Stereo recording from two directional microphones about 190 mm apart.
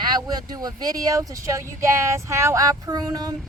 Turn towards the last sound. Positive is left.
turn(degrees=-20)  # may be behind; listen again after turning